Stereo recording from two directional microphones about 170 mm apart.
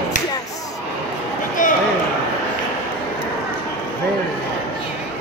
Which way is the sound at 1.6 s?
50° left (ahead or behind).